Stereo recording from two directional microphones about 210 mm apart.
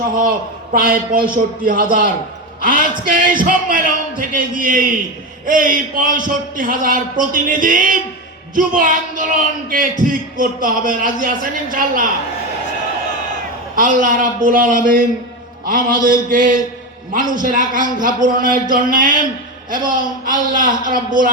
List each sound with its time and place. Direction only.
0.0 s a man's voice: 40° right (ahead or behind)
13.7 s speech: 40° right (ahead or behind)